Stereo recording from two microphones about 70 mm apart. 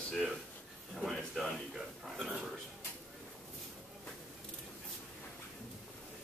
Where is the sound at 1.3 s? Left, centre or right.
Centre.